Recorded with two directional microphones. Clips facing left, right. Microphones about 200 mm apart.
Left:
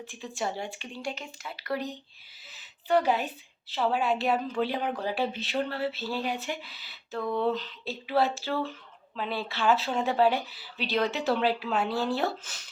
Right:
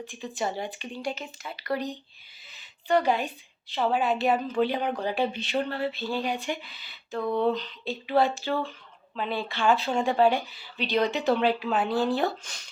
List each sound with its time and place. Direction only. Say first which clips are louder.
0.0 s a woman's voice: right 2 dB; centre (ahead or behind)
7.2 s a sound: right 3 dB; 20° right (ahead or behind)
7.4 s a woman's voice: right 2 dB; 5° left (ahead or behind)